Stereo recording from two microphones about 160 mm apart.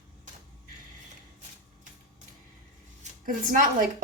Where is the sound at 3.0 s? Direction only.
45° right (ahead or behind).